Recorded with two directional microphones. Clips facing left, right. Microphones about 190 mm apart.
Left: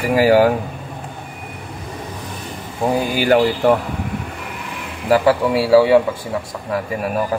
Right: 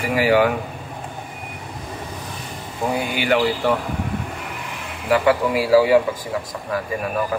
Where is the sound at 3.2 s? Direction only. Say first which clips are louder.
Left 5 dB; 40° left (ahead or behind).